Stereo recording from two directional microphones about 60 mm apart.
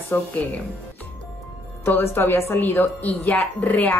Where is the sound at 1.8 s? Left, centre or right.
Left.